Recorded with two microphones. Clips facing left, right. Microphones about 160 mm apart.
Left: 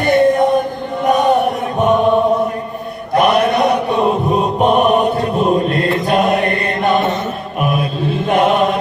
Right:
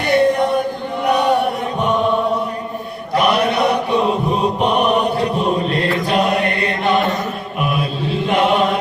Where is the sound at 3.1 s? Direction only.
50° left (ahead or behind).